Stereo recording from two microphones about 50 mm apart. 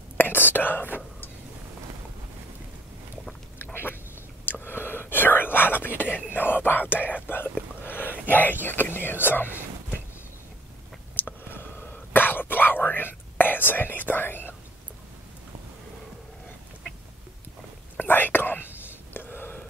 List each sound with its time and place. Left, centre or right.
0.2 s whispering: left
3.5 s duck: left
4.5 s whispering: left
6.3 s speech: left
7.2 s a sound: left
11.1 s whispering: left
17.9 s whispering: left